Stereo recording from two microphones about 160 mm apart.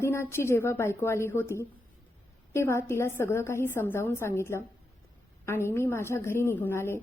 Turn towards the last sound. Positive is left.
turn(degrees=15)  # may be behind; listen again after turning